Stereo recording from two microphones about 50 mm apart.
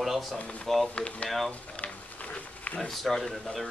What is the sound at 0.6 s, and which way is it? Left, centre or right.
Speech, centre.